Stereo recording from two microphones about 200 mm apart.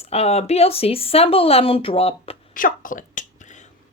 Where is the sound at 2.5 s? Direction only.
45° left (ahead or behind).